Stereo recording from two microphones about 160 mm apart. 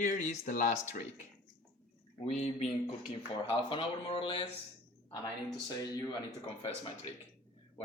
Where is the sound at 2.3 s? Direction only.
45° left (ahead or behind).